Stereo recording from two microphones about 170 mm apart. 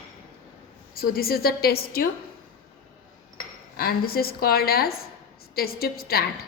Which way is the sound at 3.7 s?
65° left (ahead or behind).